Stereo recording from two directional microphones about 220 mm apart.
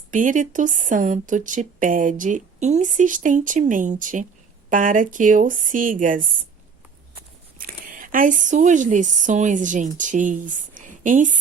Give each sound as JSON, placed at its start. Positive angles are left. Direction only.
{"t": 0.1, "sound": "speech", "side_deg": -35}
{"t": 7.6, "sound": "speech", "side_deg": -40}